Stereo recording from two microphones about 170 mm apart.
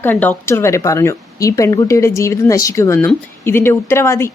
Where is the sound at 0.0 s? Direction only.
10° left (ahead or behind).